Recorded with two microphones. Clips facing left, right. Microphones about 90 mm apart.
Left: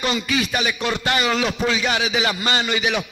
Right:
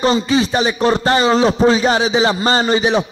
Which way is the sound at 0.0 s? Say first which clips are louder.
Right 8 dB; 30° right (ahead or behind).